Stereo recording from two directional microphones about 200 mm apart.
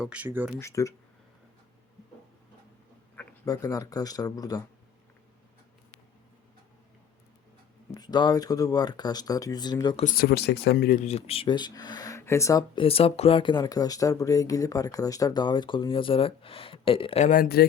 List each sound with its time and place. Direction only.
0.0 s speech: 5° right (ahead or behind)
0.6 s speech: 15° left (ahead or behind)
3.4 s speech: 20° left (ahead or behind)
7.9 s speech: 20° left (ahead or behind)
10.0 s speech: 45° left (ahead or behind)